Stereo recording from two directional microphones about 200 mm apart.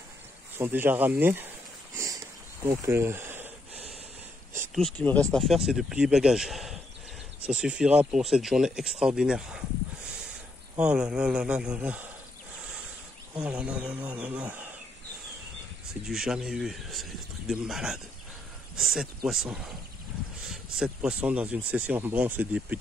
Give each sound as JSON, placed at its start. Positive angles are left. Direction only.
{"t": 0.6, "sound": "speech", "side_deg": -10}
{"t": 2.0, "sound": "a sound", "side_deg": -15}
{"t": 2.9, "sound": "speech", "side_deg": -10}
{"t": 4.7, "sound": "speech", "side_deg": 5}
{"t": 10.0, "sound": "a sound", "side_deg": -5}
{"t": 10.8, "sound": "speech", "side_deg": -5}
{"t": 13.4, "sound": "speech", "side_deg": -5}
{"t": 16.1, "sound": "speech", "side_deg": 0}